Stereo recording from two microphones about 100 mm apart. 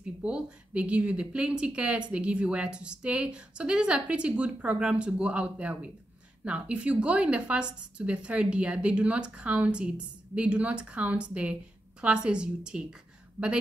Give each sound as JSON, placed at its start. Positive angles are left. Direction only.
{"t": 0.0, "sound": "speech", "side_deg": -10}